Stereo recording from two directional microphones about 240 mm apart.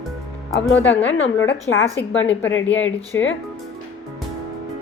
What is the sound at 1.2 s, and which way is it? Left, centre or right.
Speech, left.